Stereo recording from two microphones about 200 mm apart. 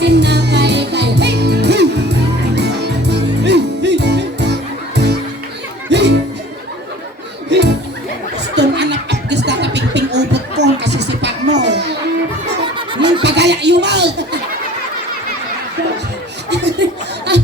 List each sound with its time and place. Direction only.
0.0 s music: 60° right (ahead or behind)
7.5 s music: 60° right (ahead or behind)
8.5 s snicker: 60° right (ahead or behind)
11.6 s a sound: 60° right (ahead or behind)
13.2 s a sound: 60° right (ahead or behind)
16.5 s chuckle: 60° right (ahead or behind)